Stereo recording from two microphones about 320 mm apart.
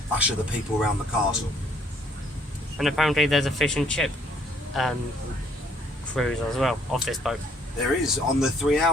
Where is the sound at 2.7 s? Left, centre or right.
Centre.